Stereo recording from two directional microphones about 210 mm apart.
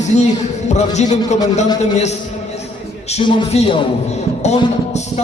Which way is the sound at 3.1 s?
25° left (ahead or behind).